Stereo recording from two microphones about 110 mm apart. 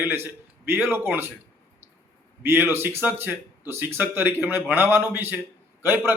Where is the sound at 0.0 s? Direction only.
20° right (ahead or behind).